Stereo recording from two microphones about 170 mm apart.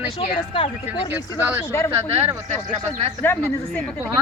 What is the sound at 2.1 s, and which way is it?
Speech, 35° right (ahead or behind).